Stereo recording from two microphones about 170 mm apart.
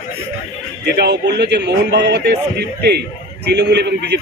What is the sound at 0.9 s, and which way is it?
A man's voice, 80° right.